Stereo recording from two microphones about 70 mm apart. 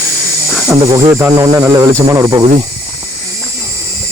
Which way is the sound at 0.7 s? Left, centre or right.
Right.